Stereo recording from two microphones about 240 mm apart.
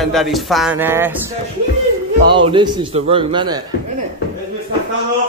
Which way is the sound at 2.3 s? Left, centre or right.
Centre.